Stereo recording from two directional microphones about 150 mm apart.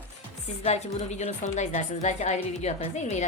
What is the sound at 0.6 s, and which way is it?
A woman's voice, 45° left (ahead or behind).